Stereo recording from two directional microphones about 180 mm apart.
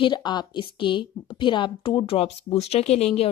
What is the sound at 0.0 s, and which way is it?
A woman's voice, 25° left (ahead or behind).